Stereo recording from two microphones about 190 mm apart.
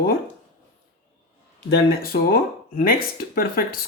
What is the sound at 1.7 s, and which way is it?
Speech, 50° left (ahead or behind).